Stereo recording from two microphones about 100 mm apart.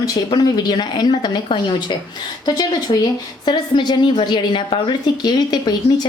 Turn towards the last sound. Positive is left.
turn(degrees=45)  # may be behind; listen again after turning